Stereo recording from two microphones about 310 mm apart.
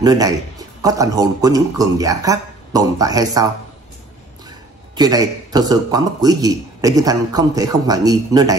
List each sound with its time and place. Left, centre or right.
0.0 s a man's voice: centre
4.9 s a man's voice: centre